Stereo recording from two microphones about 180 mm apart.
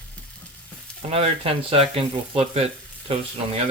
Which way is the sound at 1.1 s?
35° right (ahead or behind).